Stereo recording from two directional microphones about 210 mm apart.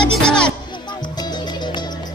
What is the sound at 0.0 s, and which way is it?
Music, 5° left (ahead or behind).